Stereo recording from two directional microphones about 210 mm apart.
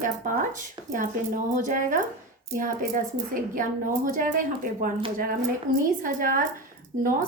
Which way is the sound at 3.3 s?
40° right (ahead or behind).